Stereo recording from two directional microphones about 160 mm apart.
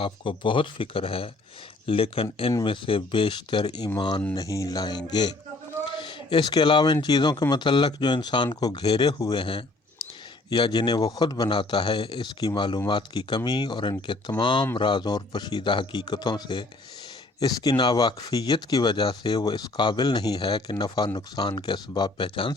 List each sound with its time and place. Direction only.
0.0 s speech: 30° left (ahead or behind)